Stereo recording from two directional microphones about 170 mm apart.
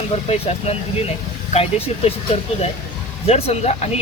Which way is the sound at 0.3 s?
35° left (ahead or behind).